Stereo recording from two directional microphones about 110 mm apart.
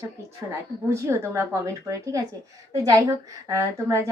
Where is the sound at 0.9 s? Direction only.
25° right (ahead or behind).